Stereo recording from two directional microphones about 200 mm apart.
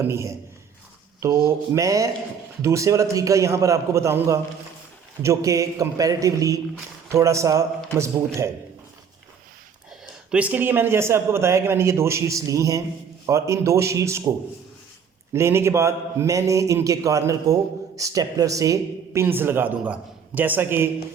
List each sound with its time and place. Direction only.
0.0 s a man's voice: 15° right (ahead or behind)
10.3 s a man's voice: 10° right (ahead or behind)